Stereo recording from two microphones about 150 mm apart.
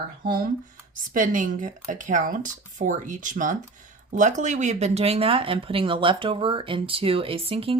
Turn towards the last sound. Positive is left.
turn(degrees=-40)  # may be behind; listen again after turning